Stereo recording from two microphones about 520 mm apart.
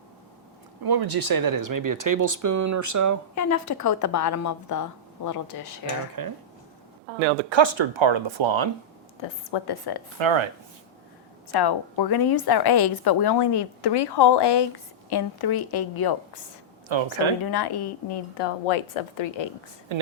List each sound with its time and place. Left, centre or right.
0.9 s speech: right
3.3 s a woman's voice: left
6.2 s speech: right
7.5 s speech: right
9.2 s a woman's voice: left
10.2 s speech: right
11.5 s a woman's voice: left
16.9 s speech: right
17.4 s a woman's voice: left
18.3 s a woman's voice: left
19.9 s a woman's voice: right